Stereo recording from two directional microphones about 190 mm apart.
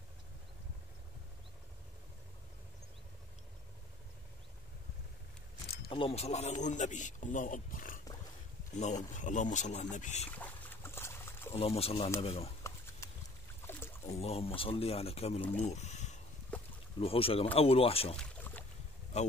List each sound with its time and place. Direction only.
5.9 s a man's voice: 30° left (ahead or behind)
10.3 s boat: 10° left (ahead or behind)
11.5 s a man's voice: 30° left (ahead or behind)
13.0 s boat: 15° left (ahead or behind)
13.6 s rowboat: 15° left (ahead or behind)
14.0 s a man's voice: 35° left (ahead or behind)
15.6 s a sound: 35° left (ahead or behind)
17.0 s a man's voice: 30° left (ahead or behind)
18.1 s boat: 5° left (ahead or behind)